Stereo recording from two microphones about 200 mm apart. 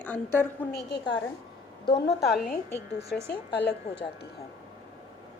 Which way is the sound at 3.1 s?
Centre (ahead or behind).